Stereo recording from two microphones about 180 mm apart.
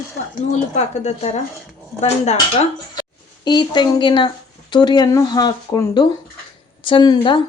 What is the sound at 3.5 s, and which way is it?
Speech, 25° left (ahead or behind).